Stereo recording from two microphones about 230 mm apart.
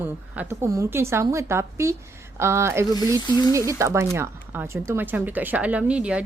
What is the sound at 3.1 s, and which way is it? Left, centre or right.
Speech, centre.